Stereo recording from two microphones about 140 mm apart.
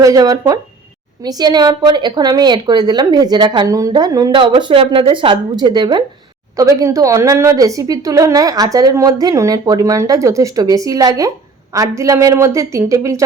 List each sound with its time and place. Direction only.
0.0 s a woman's voice: 25° right (ahead or behind)